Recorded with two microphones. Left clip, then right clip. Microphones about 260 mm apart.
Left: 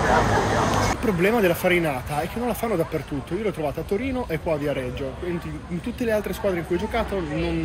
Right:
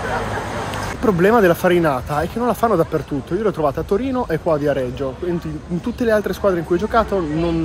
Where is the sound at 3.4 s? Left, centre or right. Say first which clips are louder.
Right 9 dB; centre.